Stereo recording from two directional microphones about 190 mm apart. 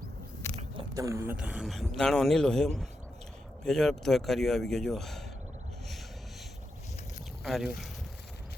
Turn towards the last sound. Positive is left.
turn(degrees=0)  # may be behind; listen again after turning